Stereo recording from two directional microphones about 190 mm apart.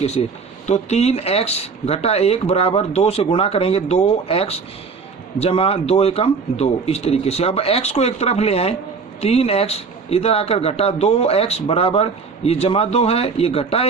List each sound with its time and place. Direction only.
0.0 s a man's voice: 35° left (ahead or behind)